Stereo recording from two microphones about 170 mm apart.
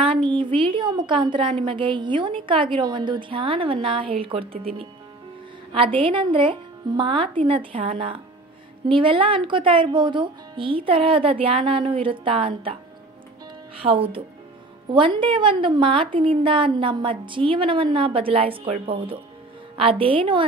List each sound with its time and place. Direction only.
0.0 s a woman's voice: 30° right (ahead or behind)
13.8 s a woman's voice: 35° right (ahead or behind)